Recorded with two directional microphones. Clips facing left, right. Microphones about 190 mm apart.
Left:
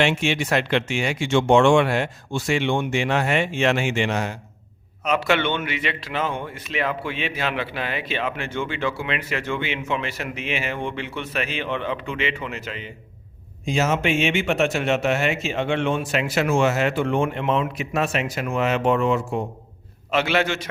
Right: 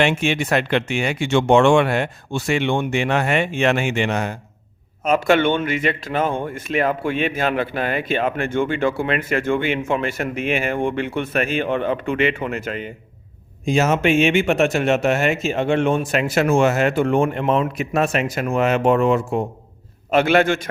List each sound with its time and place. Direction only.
0.0 s speech: 55° right (ahead or behind)